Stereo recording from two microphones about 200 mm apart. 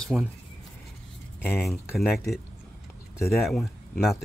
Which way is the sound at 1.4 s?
5° left (ahead or behind).